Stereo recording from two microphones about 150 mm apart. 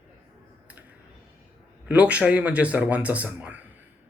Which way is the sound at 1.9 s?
10° right (ahead or behind).